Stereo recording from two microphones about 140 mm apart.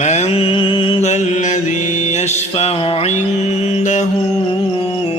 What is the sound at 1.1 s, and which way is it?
Mantra, 60° left (ahead or behind).